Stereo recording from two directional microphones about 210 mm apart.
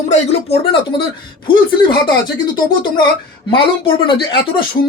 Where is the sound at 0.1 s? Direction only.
30° left (ahead or behind).